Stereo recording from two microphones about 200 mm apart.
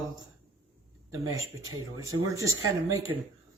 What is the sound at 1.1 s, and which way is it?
Speech, 15° right (ahead or behind).